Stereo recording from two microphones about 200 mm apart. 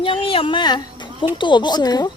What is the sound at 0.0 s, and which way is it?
Speech, 25° left (ahead or behind).